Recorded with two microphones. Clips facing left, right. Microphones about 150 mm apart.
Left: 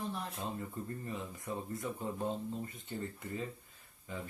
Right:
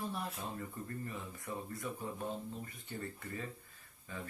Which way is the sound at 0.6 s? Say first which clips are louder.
Left 1 dB; 20° left (ahead or behind).